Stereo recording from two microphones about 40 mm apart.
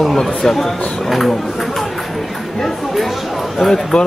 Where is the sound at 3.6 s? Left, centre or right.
Centre.